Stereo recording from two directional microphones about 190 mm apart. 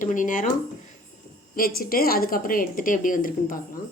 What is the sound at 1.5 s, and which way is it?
Speech, 50° left (ahead or behind).